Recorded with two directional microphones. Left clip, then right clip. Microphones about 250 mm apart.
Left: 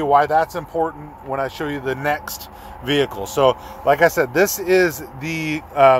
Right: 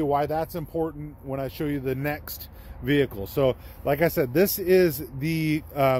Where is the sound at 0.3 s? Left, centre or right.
Centre.